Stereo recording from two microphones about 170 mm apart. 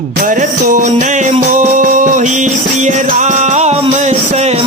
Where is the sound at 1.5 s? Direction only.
50° right (ahead or behind).